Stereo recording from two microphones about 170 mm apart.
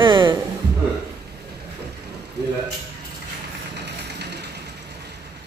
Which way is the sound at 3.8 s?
80° right.